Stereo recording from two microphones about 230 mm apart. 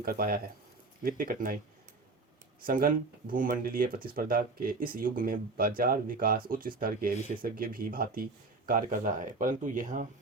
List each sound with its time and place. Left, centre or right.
0.0 s speech: right
2.6 s speech: right